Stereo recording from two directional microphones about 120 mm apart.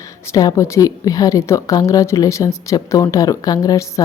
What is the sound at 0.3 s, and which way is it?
A woman's voice, 30° left (ahead or behind).